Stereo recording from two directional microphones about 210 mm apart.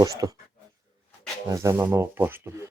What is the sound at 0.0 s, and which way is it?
Speech, 15° right (ahead or behind).